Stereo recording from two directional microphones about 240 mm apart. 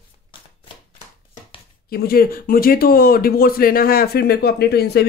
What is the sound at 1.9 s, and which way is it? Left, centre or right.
Speech, left.